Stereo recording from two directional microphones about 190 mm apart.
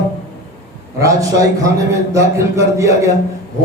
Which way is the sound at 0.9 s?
15° right (ahead or behind).